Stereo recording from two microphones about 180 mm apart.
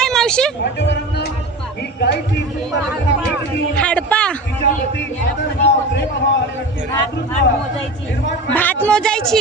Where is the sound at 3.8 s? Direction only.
5° left (ahead or behind).